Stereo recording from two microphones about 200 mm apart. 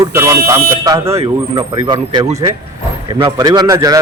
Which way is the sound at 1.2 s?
25° right (ahead or behind).